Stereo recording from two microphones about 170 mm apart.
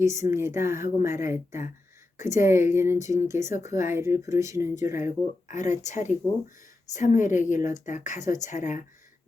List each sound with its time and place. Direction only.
0.0 s speech: 15° right (ahead or behind)
5.5 s a woman's voice: 45° left (ahead or behind)